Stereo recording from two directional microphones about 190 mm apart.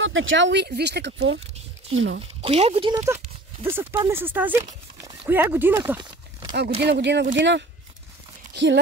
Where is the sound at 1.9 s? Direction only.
85° right.